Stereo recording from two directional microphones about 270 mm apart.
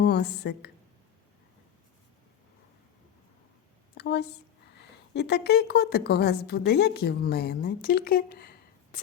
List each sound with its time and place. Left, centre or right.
0.0 s a woman's voice: left
3.9 s a woman's voice: left